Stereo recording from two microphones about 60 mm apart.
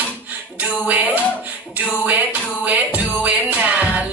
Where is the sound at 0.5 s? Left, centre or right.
Right.